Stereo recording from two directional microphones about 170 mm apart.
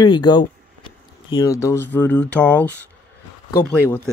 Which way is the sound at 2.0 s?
10° left (ahead or behind).